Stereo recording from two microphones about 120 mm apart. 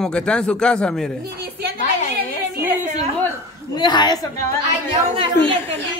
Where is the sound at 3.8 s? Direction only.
40° left (ahead or behind).